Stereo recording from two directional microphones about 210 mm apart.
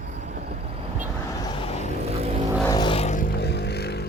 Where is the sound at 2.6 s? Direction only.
20° left (ahead or behind).